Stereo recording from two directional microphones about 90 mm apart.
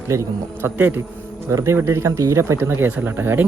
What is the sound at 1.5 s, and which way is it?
Speech, 30° right (ahead or behind).